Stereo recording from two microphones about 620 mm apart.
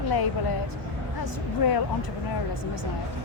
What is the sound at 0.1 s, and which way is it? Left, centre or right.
Speech, left.